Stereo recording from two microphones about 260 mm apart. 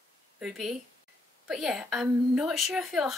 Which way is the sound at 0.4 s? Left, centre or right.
Centre.